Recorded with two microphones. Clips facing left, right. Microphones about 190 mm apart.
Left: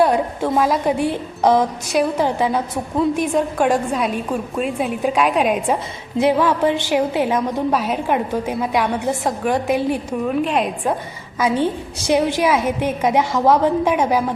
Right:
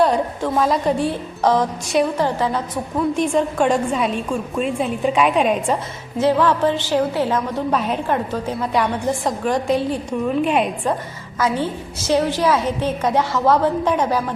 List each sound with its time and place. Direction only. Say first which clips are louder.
0.0 s a woman's voice: left 1 dB; 10° left (ahead or behind)
1.9 s a woman's voice: right 1 dB; centre (ahead or behind)
2.2 s a woman's voice: left 2 dB; 10° left (ahead or behind)
6.1 s a woman's voice: left 1 dB; 15° left (ahead or behind); by 10.9 s centre (ahead or behind)
11.3 s a woman's voice: left 2 dB; 15° left (ahead or behind)